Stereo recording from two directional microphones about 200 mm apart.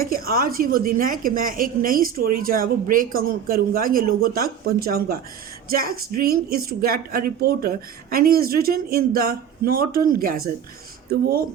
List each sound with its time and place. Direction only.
0.1 s a woman's voice: 45° right (ahead or behind)